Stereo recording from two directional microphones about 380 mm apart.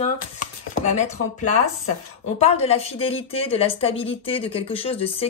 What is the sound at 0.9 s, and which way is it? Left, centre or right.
Chopping, centre.